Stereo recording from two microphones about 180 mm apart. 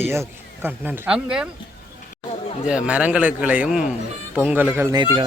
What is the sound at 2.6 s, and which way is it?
A man's voice, 5° right (ahead or behind).